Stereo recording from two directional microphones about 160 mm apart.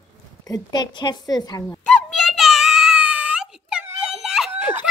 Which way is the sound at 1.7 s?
5° left (ahead or behind).